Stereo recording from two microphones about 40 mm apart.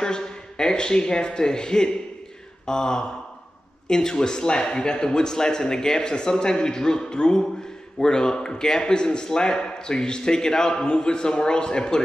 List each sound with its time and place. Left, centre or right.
0.0 s a man's voice: centre